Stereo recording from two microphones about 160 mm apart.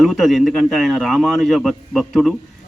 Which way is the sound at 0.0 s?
Centre (ahead or behind).